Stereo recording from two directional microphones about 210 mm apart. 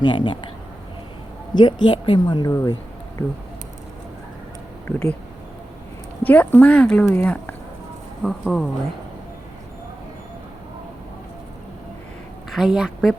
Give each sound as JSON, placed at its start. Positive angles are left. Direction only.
{"t": 0.0, "sound": "a woman's voice", "side_deg": 20}
{"t": 1.5, "sound": "a woman's voice", "side_deg": 20}
{"t": 4.9, "sound": "speech", "side_deg": 0}
{"t": 6.2, "sound": "speech", "side_deg": 5}
{"t": 12.5, "sound": "a woman's voice", "side_deg": 0}